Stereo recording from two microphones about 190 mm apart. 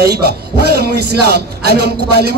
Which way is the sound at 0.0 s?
60° right (ahead or behind).